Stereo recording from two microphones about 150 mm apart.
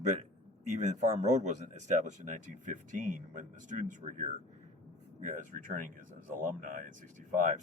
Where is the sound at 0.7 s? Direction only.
55° right (ahead or behind).